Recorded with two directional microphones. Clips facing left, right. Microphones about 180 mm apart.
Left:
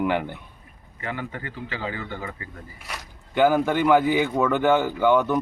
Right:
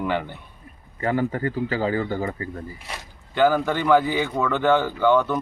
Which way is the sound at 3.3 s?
10° left (ahead or behind).